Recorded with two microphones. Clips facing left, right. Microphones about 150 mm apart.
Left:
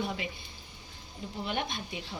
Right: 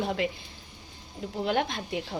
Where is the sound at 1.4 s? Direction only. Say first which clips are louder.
Right 7 dB; 80° right.